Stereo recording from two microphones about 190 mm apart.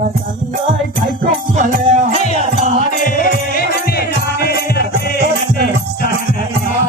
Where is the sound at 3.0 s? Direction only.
50° left (ahead or behind).